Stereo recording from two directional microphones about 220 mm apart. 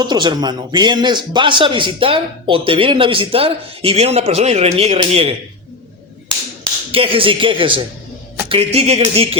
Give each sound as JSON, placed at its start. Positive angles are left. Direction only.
{"t": 0.0, "sound": "a man's voice", "side_deg": -20}
{"t": 6.9, "sound": "a man's voice", "side_deg": -25}